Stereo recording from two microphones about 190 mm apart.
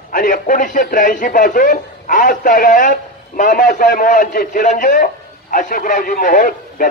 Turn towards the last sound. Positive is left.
turn(degrees=45)  # may be behind; listen again after turning